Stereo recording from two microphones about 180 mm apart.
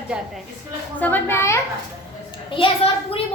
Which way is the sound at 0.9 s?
10° left (ahead or behind).